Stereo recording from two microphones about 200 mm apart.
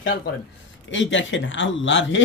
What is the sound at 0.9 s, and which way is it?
Speech, 70° left (ahead or behind).